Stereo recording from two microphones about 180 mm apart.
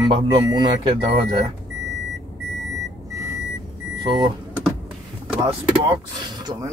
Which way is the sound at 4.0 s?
25° right (ahead or behind).